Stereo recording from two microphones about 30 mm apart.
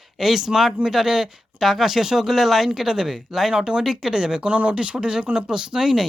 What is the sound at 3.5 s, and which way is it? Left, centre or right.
Speech, right.